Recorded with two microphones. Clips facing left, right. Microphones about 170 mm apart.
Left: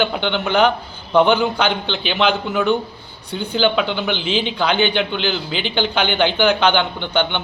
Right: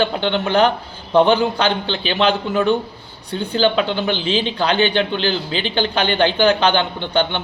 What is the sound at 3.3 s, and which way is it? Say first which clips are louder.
Speech: right 1 dB; centre (ahead or behind).